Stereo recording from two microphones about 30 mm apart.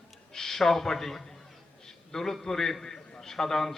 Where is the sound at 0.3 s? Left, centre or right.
Centre.